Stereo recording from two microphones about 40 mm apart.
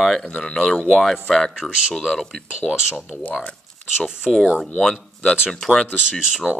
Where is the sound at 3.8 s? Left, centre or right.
Centre.